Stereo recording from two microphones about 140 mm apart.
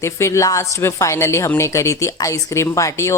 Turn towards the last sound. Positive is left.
turn(degrees=20)  # may be behind; listen again after turning